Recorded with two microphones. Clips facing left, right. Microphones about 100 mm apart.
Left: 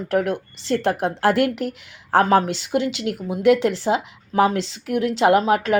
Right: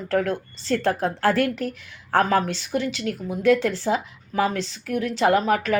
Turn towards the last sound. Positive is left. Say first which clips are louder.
# left 3 dB
turn(degrees=25)  # may be behind; listen again after turning